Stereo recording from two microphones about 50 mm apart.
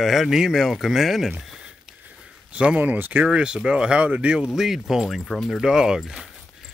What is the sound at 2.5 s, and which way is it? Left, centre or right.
Speech, right.